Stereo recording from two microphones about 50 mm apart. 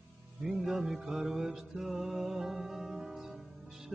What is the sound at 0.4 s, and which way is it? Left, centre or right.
Music, centre.